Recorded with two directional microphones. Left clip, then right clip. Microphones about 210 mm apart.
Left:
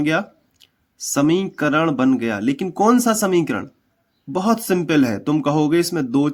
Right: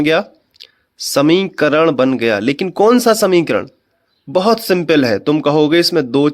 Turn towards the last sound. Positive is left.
turn(degrees=-15)  # may be behind; listen again after turning